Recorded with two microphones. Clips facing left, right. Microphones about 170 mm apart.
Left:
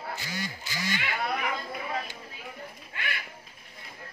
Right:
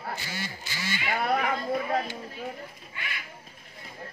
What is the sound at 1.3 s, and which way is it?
Chatter, 40° right (ahead or behind).